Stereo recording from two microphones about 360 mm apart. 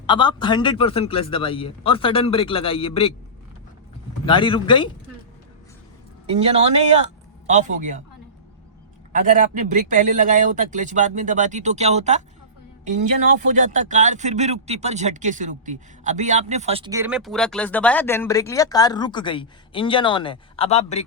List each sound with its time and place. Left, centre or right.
0.0 s a man's voice: centre
4.3 s a man's voice: centre
6.2 s a man's voice: centre
9.1 s a man's voice: right
13.6 s speech: right; by 21.0 s centre